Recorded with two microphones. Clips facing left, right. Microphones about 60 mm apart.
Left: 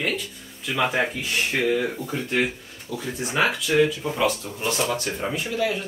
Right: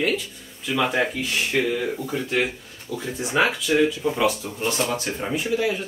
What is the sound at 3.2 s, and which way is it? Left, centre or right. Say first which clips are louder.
Speech: right 2 dB; centre.